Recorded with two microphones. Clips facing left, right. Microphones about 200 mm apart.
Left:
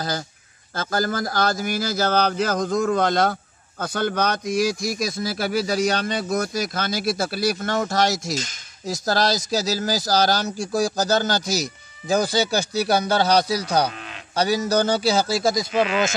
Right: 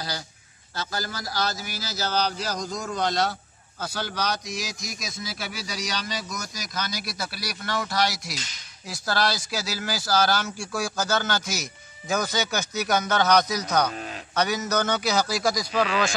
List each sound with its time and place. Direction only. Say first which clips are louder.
0.7 s speech: left 9 dB; 50° left (ahead or behind); by 16.2 s 25° left (ahead or behind)